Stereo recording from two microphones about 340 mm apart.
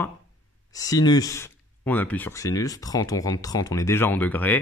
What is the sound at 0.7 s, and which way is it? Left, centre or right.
Speech, centre.